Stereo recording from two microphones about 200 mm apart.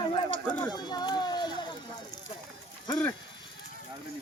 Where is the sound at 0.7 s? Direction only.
20° left (ahead or behind).